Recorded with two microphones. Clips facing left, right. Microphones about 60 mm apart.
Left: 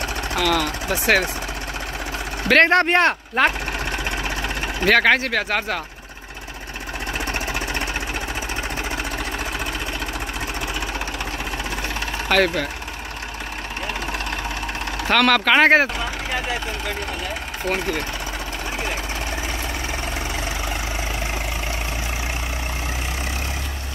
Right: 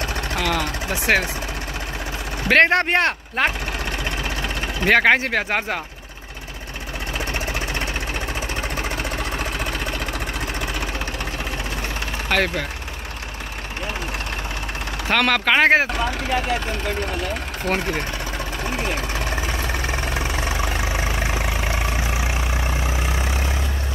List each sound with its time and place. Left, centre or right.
0.4 s speech: centre
2.5 s speech: centre
4.8 s speech: centre
12.3 s speech: centre
15.0 s speech: centre
17.6 s speech: right